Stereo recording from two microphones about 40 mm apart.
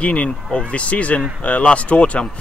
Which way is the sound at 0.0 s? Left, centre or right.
Left.